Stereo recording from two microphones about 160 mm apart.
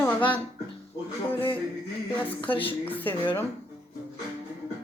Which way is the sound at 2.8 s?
10° left (ahead or behind).